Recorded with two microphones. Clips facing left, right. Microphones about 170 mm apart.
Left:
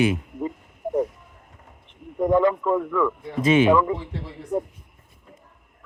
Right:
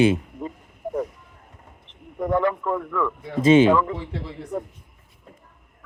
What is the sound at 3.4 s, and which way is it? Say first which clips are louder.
Speech: right 4 dB; 30° right (ahead or behind).